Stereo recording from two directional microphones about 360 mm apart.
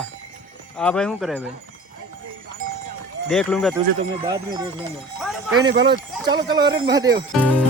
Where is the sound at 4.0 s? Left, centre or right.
Centre.